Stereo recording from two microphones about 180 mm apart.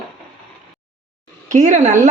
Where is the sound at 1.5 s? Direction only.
45° right (ahead or behind).